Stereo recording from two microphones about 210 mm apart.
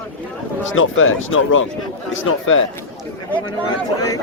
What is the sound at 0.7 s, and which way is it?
Speech, 70° left (ahead or behind).